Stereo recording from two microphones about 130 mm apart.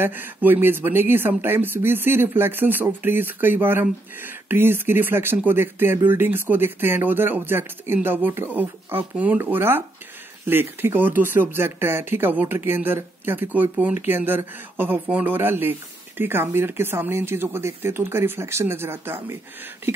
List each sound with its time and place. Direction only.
0.0 s speech: 15° right (ahead or behind)